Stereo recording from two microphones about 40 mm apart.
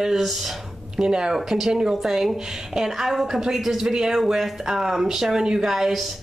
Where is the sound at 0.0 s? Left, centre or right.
Centre.